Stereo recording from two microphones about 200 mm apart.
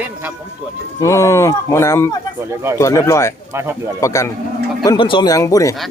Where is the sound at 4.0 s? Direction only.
15° left (ahead or behind).